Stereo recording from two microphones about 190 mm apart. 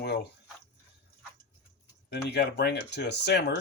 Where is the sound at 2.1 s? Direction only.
60° left (ahead or behind).